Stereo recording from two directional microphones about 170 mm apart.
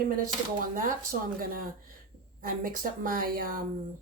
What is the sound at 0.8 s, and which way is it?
A woman's voice, 55° right (ahead or behind).